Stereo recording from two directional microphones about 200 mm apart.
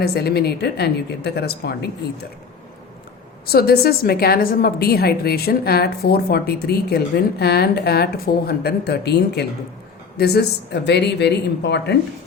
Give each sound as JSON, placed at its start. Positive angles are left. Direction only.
{"t": 0.0, "sound": "a woman's voice", "side_deg": 50}
{"t": 3.5, "sound": "a woman's voice", "side_deg": 50}